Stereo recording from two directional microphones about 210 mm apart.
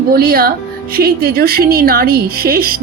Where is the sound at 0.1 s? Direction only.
45° right (ahead or behind).